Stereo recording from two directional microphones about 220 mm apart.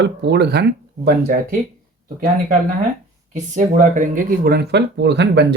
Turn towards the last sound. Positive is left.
turn(degrees=-50)  # may be behind; listen again after turning